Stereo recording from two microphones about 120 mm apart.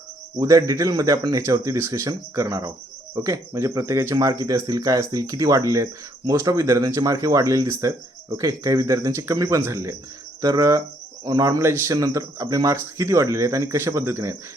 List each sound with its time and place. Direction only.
0.3 s speech: 30° right (ahead or behind)
10.4 s cricket: 30° right (ahead or behind)
11.3 s speech: 30° right (ahead or behind)